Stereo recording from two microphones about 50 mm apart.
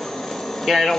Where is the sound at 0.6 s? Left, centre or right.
Centre.